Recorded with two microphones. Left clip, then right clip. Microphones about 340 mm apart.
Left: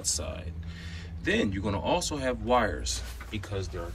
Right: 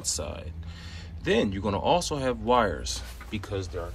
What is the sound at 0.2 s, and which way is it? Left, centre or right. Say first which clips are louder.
Speech: right 2 dB; right.